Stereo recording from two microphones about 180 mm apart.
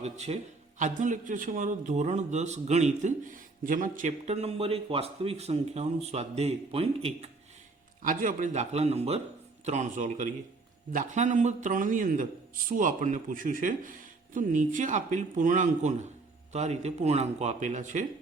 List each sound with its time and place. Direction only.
0.0 s a man's voice: 40° right (ahead or behind)
8.0 s a man's voice: 45° right (ahead or behind)